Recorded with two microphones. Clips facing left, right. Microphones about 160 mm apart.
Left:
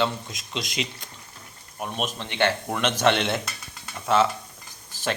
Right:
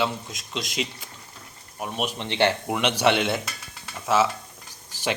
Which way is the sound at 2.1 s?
25° right (ahead or behind).